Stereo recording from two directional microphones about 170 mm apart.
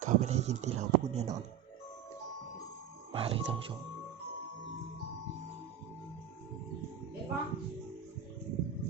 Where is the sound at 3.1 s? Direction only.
35° right (ahead or behind).